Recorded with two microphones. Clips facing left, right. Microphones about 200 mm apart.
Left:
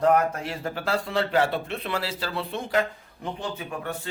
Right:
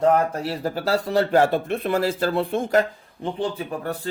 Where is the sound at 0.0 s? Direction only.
30° right (ahead or behind).